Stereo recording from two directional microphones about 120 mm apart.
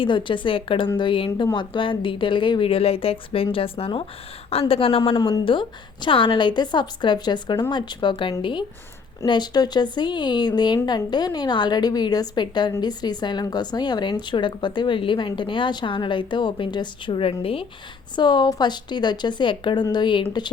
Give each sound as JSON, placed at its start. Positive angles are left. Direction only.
{"t": 0.0, "sound": "speech", "side_deg": 45}
{"t": 5.1, "sound": "speech", "side_deg": 40}
{"t": 18.2, "sound": "speech", "side_deg": 40}